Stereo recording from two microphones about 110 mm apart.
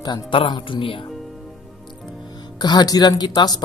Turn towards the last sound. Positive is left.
turn(degrees=35)  # may be behind; listen again after turning